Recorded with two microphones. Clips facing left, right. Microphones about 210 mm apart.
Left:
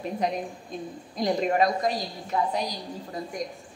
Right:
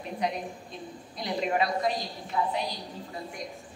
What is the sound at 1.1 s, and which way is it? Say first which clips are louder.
A woman's voice: left 5 dB; 45° left (ahead or behind).